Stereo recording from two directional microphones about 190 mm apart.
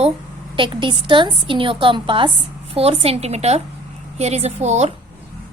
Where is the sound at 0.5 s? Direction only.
25° right (ahead or behind).